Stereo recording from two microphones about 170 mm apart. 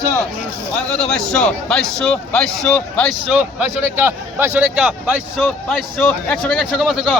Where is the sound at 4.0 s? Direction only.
15° right (ahead or behind).